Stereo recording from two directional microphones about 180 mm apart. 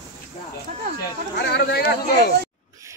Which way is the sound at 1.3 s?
65° left (ahead or behind).